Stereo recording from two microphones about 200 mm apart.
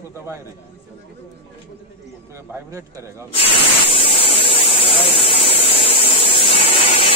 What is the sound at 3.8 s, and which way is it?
Electric toothbrush, 25° left (ahead or behind).